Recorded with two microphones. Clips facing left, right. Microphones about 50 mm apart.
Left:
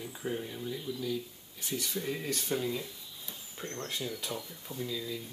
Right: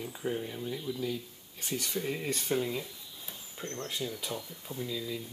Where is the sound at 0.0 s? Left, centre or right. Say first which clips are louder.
Right 2 dB; centre.